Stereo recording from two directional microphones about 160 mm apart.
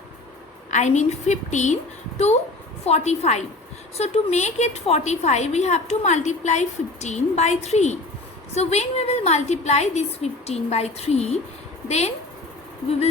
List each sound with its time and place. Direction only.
0.7 s a woman's voice: 45° left (ahead or behind)